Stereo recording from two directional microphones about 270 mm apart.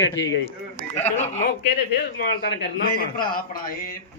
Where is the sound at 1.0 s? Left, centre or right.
Left.